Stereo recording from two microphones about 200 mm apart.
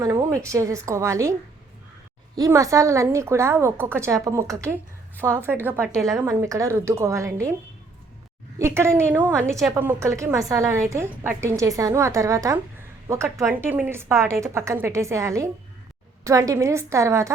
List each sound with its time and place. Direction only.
0.0 s a woman's voice: 15° right (ahead or behind)
2.3 s a woman's voice: 15° right (ahead or behind)
8.5 s a woman's voice: 15° right (ahead or behind)